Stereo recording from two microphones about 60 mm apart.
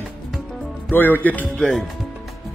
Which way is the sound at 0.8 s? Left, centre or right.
Left.